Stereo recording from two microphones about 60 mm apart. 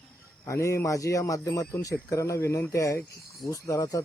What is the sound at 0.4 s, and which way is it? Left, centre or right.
Speech, left.